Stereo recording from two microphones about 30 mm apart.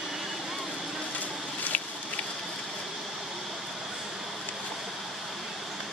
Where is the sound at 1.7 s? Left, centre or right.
Left.